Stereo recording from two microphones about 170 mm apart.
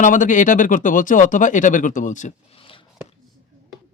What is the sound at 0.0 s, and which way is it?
Speech, 50° left (ahead or behind).